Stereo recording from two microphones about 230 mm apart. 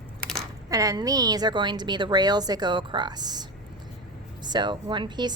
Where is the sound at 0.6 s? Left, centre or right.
Centre.